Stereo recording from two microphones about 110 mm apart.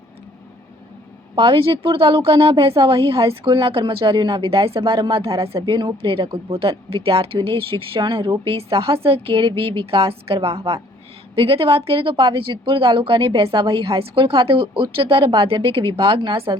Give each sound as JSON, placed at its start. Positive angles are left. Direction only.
{"t": 1.4, "sound": "speech", "side_deg": -55}
{"t": 5.7, "sound": "speech", "side_deg": -50}